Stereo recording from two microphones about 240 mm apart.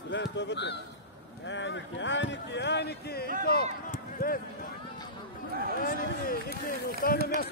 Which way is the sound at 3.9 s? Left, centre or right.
Left.